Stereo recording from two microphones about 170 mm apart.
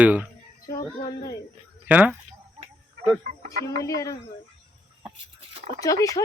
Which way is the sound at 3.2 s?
65° right (ahead or behind).